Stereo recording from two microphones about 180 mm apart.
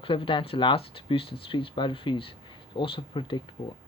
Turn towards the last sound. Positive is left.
turn(degrees=25)  # may be behind; listen again after turning